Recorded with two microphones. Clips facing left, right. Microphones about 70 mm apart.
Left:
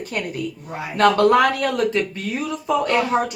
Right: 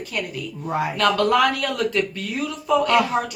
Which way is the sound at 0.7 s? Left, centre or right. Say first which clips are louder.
Right 7 dB; right.